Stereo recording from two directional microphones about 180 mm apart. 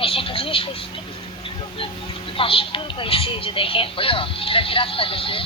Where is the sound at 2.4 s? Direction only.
30° left (ahead or behind).